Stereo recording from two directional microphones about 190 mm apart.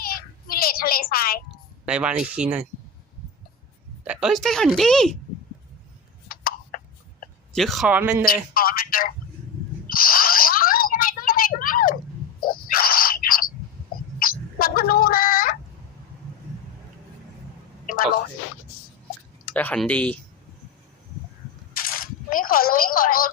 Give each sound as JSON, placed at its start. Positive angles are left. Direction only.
{"t": 0.0, "sound": "child singing", "side_deg": 50}
{"t": 1.8, "sound": "a woman's voice", "side_deg": -5}
{"t": 4.0, "sound": "a woman's voice", "side_deg": -5}
{"t": 6.2, "sound": "a sound", "side_deg": 50}
{"t": 7.5, "sound": "a woman's voice", "side_deg": 0}
{"t": 8.3, "sound": "speech", "side_deg": 50}
{"t": 9.9, "sound": "a sound", "side_deg": 50}
{"t": 12.4, "sound": "bird", "side_deg": 50}
{"t": 14.2, "sound": "a sound", "side_deg": 50}
{"t": 19.5, "sound": "speech", "side_deg": 5}
{"t": 21.8, "sound": "coin", "side_deg": 50}